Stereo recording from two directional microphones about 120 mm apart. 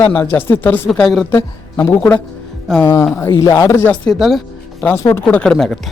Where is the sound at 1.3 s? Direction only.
20° left (ahead or behind).